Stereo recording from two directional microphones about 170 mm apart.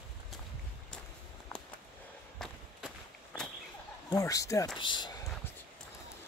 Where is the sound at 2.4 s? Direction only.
Centre (ahead or behind).